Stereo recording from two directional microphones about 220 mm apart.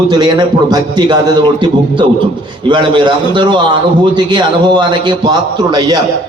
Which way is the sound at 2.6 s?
20° right (ahead or behind).